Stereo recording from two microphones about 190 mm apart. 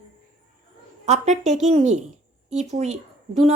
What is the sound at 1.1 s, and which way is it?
Speech, 35° right (ahead or behind).